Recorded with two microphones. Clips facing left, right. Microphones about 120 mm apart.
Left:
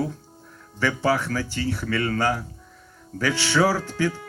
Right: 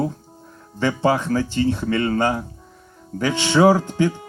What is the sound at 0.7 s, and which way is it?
Speech, 20° right (ahead or behind).